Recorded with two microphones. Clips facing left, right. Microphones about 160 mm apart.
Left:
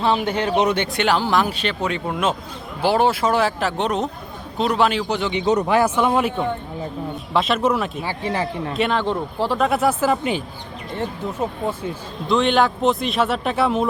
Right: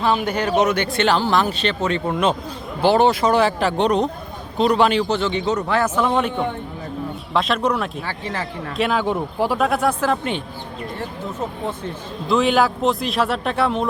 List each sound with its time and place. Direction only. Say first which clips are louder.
0.0 s speech: even; 30° left (ahead or behind); by 5.0 s centre (ahead or behind)
5.0 s speech: even; 15° left (ahead or behind)
7.3 s speech: left 1 dB; centre (ahead or behind)
8.0 s speech: left 4 dB; 15° left (ahead or behind)
8.7 s speech: right 2 dB; centre (ahead or behind)
9.6 s speech: left 1 dB; centre (ahead or behind)
12.3 s speech: even; 5° right (ahead or behind)